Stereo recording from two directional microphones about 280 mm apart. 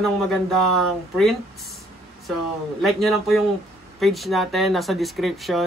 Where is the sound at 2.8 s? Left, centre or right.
Centre.